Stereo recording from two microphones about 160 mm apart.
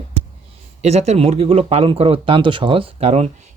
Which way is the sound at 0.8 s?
45° right (ahead or behind).